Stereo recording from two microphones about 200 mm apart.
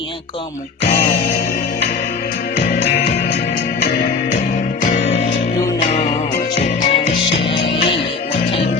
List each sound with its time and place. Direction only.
0.8 s music: 60° left (ahead or behind)
4.8 s music: 40° left (ahead or behind)